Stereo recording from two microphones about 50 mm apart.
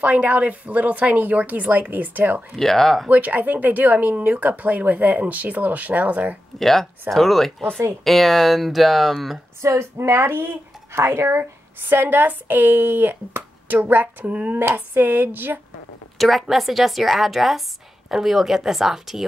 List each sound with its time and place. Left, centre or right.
0.0 s speech: right
2.5 s a woman's voice: centre
3.1 s speech: right
6.6 s a woman's voice: centre
9.6 s a woman's voice: right
14.3 s speech: right
15.0 s speech: right
16.2 s a woman's voice: centre